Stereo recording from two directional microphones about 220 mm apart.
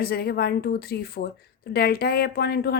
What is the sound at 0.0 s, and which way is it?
A woman's voice, 45° left (ahead or behind).